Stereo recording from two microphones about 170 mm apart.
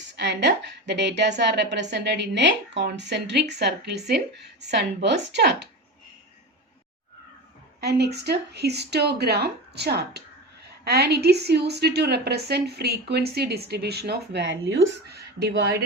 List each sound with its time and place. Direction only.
0.2 s a woman's voice: 90° right
7.8 s a woman's voice: 75° right (ahead or behind)